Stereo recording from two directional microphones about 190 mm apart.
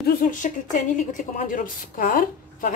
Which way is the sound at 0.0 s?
45° left (ahead or behind).